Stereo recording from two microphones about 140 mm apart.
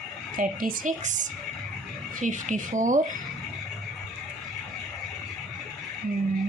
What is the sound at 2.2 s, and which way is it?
Speech, 65° right (ahead or behind).